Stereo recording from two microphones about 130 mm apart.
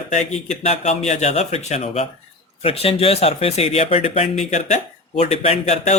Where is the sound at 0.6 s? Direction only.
60° left (ahead or behind).